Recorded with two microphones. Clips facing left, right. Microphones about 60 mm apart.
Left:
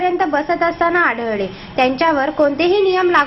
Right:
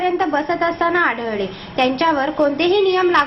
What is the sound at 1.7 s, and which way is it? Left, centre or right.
Speech, left.